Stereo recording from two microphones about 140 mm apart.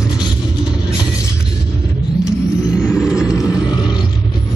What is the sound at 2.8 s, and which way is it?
Vehicle, 5° right (ahead or behind).